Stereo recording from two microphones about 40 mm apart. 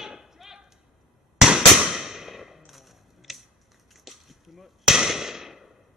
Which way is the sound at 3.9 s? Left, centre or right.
Centre.